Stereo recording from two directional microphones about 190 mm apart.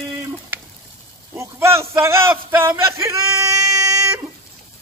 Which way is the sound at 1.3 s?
15° right (ahead or behind).